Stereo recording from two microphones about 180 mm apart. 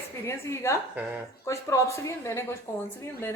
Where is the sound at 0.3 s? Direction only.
15° left (ahead or behind).